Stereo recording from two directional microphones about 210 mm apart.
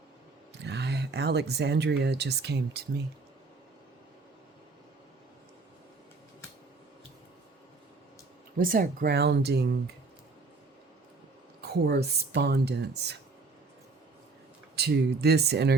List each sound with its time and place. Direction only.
0.6 s speech: 55° right (ahead or behind)
8.5 s speech: 40° right (ahead or behind)
11.6 s speech: 50° right (ahead or behind)
14.8 s speech: 50° right (ahead or behind)